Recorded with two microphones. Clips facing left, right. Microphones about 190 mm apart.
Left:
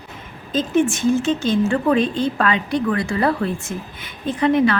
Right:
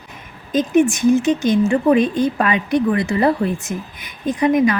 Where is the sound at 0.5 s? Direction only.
15° right (ahead or behind).